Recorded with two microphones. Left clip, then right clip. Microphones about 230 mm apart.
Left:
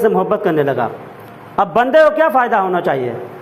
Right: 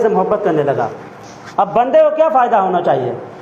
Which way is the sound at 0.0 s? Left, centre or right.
Left.